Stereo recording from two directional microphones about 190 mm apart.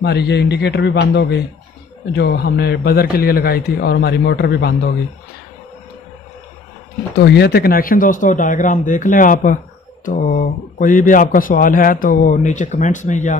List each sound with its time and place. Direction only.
0.0 s a man's voice: 60° left (ahead or behind)
7.2 s a man's voice: 60° left (ahead or behind); by 13.4 s 40° left (ahead or behind)